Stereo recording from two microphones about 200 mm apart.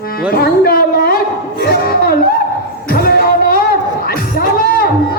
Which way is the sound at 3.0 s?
50° left (ahead or behind).